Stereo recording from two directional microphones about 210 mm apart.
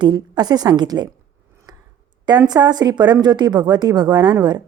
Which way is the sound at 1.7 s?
20° right (ahead or behind).